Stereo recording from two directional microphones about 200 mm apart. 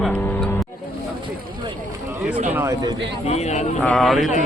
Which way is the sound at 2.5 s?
15° right (ahead or behind).